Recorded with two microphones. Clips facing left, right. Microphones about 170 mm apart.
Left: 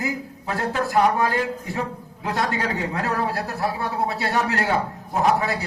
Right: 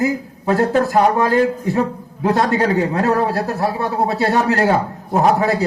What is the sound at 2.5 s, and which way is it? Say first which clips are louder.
A man's voice: right 9 dB; 40° right (ahead or behind).